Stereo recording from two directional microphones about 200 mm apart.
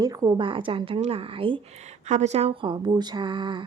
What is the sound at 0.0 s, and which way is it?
Speech, 15° right (ahead or behind).